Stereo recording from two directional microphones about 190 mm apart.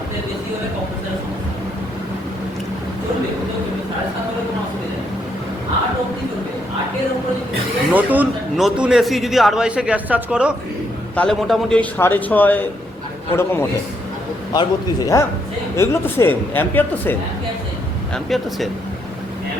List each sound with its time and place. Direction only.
7.9 s a man's voice: 10° right (ahead or behind)
11.1 s a man's voice: 5° left (ahead or behind)